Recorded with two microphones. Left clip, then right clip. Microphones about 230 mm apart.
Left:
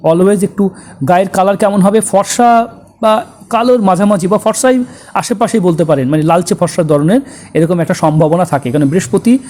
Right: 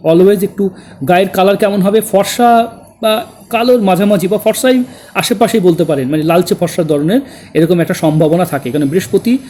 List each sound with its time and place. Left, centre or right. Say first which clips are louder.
0.0 s speech: right 1 dB; centre